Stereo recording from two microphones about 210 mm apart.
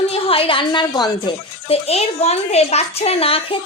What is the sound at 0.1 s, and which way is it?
A woman's voice, 25° left (ahead or behind).